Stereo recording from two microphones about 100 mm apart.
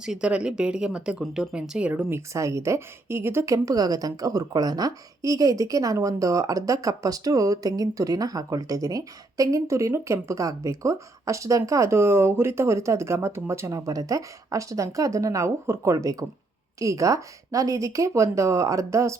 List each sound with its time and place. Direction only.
0.0 s speech: 10° right (ahead or behind)
2.0 s a woman's voice: 25° right (ahead or behind)